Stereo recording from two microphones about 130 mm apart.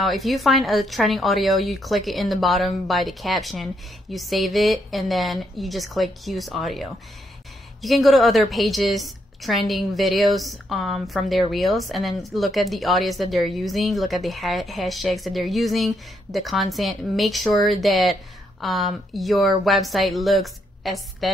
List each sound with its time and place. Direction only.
0.0 s a woman's voice: centre (ahead or behind)